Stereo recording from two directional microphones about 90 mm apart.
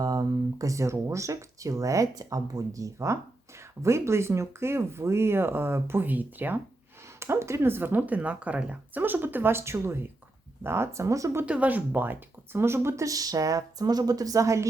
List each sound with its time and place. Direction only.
0.0 s speech: 45° right (ahead or behind)
11.4 s speech: 15° right (ahead or behind); by 14.7 s 35° right (ahead or behind)